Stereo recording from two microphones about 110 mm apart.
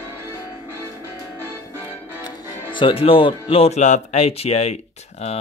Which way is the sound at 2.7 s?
50° left (ahead or behind).